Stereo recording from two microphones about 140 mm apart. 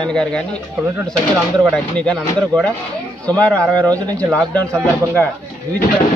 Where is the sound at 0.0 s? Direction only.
5° left (ahead or behind).